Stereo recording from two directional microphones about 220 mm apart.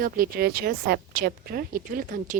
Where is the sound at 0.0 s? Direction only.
45° right (ahead or behind).